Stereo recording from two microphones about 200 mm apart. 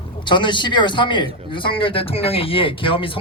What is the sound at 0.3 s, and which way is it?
A man's voice, 25° left (ahead or behind).